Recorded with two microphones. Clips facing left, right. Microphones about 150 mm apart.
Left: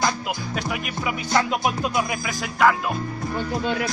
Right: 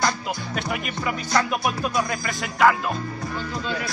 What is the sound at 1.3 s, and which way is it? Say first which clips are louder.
Music: left 2 dB; 20° left (ahead or behind).